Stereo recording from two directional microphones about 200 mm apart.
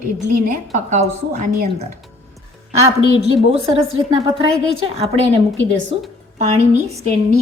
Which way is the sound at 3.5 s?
30° right (ahead or behind).